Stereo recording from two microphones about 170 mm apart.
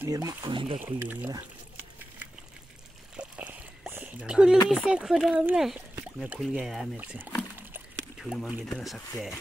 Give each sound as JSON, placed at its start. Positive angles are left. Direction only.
{"t": 0.0, "sound": "speech", "side_deg": -20}
{"t": 0.8, "sound": "speech", "side_deg": -10}
{"t": 3.2, "sound": "a sound", "side_deg": -5}
{"t": 4.6, "sound": "speech", "side_deg": -5}
{"t": 7.5, "sound": "a sound", "side_deg": -5}
{"t": 8.7, "sound": "speech", "side_deg": 5}